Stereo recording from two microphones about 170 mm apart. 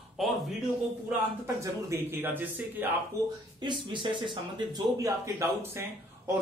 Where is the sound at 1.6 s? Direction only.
15° right (ahead or behind).